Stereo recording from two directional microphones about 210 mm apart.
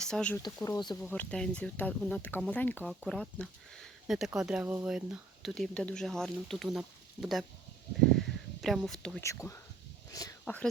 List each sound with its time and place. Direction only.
0.0 s speech: 5° left (ahead or behind)
0.3 s speech: 15° left (ahead or behind)
1.1 s speech: 5° left (ahead or behind)
8.6 s speech: centre (ahead or behind)
9.2 s speech: 15° left (ahead or behind)
10.4 s speech: 5° left (ahead or behind)